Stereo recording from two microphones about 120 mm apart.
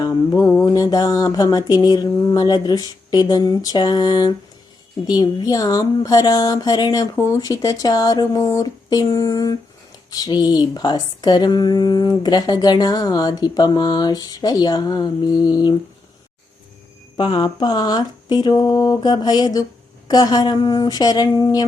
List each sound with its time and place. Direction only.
0.0 s speech: 30° left (ahead or behind)
17.2 s speech: 40° left (ahead or behind)